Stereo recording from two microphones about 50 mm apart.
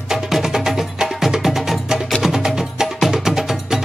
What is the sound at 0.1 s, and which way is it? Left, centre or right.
Music, centre.